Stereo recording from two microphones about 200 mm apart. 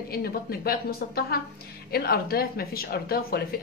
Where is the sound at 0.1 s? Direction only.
50° left (ahead or behind).